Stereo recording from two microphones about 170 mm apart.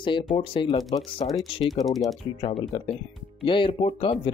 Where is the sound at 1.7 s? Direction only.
Centre (ahead or behind).